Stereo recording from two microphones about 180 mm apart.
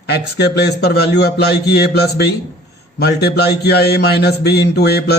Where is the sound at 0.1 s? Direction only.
65° left (ahead or behind).